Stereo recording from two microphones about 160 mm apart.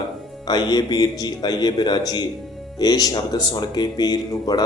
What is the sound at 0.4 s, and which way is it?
Speech, 25° left (ahead or behind).